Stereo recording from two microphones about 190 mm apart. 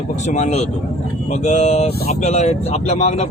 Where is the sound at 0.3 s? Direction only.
35° left (ahead or behind).